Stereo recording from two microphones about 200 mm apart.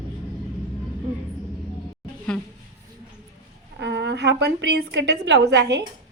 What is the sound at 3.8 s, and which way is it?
A woman's voice, 60° right (ahead or behind).